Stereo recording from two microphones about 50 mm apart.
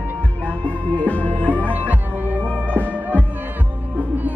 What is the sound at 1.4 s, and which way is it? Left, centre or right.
Music, right.